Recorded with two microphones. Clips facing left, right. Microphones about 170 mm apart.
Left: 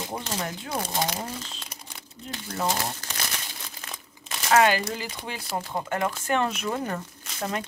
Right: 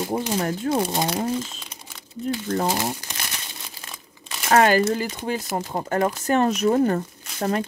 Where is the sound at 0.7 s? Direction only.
25° right (ahead or behind).